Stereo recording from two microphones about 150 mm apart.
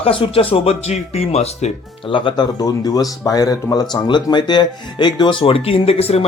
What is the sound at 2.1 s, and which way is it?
Speech, 35° left (ahead or behind).